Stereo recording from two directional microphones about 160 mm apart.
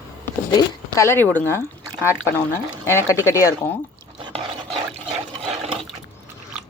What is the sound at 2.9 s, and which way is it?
Speech, 15° left (ahead or behind).